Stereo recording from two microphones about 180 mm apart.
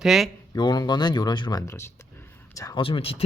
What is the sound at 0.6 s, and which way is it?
Speech, 25° left (ahead or behind).